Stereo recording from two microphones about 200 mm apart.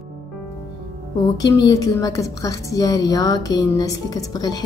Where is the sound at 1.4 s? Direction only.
20° left (ahead or behind).